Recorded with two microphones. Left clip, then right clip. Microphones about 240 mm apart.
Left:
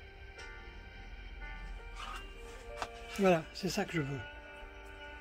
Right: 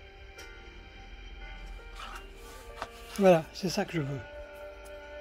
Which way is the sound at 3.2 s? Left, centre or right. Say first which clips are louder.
Right 7 dB; right.